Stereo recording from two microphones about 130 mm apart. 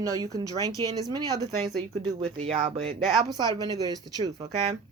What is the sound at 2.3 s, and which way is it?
Speech, 50° right (ahead or behind).